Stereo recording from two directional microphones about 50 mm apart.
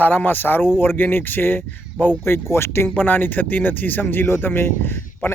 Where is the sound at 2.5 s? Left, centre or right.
Left.